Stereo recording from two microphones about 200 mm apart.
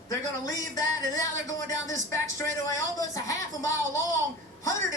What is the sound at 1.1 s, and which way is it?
A woman's voice, 15° left (ahead or behind).